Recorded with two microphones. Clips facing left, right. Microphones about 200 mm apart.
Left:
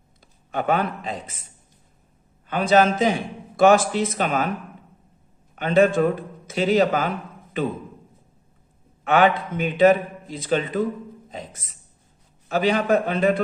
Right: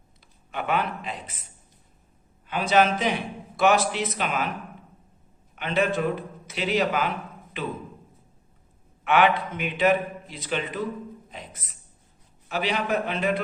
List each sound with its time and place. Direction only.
0.2 s speech: 45° left (ahead or behind)
2.5 s a man's voice: 50° left (ahead or behind)
5.5 s a man's voice: 50° left (ahead or behind)
9.0 s a man's voice: 45° left (ahead or behind)